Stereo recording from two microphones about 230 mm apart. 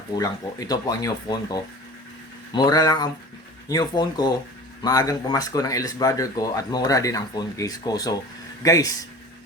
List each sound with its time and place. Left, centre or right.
0.2 s speech: centre